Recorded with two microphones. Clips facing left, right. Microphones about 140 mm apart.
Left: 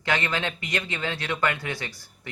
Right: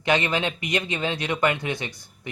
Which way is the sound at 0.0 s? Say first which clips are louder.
Right 4 dB; 20° right (ahead or behind).